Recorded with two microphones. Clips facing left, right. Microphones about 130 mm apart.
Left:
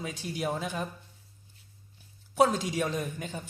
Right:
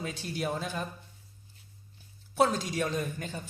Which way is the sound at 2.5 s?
10° left (ahead or behind).